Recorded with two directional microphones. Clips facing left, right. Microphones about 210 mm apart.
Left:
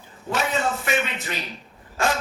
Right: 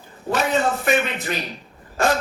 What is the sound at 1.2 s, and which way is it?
Speech, 35° right (ahead or behind).